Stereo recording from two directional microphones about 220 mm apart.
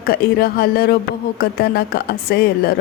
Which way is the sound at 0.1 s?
45° left (ahead or behind).